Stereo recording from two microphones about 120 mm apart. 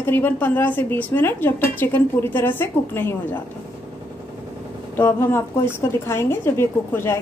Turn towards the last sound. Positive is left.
turn(degrees=20)  # may be behind; listen again after turning